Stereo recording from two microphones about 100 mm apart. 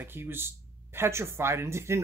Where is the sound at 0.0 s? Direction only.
20° right (ahead or behind).